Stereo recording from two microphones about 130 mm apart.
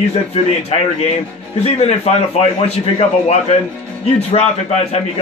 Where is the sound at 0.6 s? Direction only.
55° left (ahead or behind).